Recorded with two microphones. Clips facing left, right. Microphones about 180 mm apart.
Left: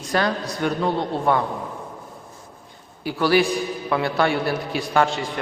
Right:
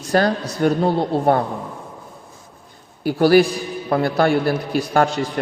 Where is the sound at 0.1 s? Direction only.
40° right (ahead or behind).